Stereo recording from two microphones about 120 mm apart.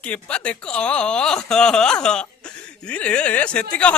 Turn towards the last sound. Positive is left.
turn(degrees=10)  # may be behind; listen again after turning